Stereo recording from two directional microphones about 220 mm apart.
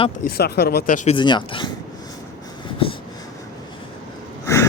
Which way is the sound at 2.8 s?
25° left (ahead or behind).